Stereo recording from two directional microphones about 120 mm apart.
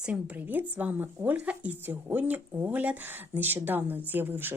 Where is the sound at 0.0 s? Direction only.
10° right (ahead or behind).